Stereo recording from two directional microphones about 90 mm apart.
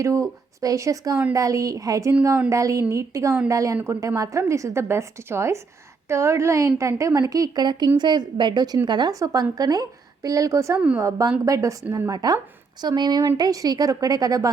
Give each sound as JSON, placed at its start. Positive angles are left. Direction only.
{"t": 0.0, "sound": "a woman's voice", "side_deg": -35}